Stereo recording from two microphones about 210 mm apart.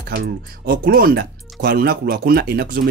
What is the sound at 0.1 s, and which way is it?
Speech, 50° right (ahead or behind).